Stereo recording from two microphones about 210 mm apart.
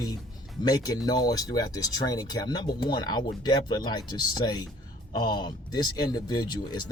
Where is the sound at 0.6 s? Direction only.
15° left (ahead or behind).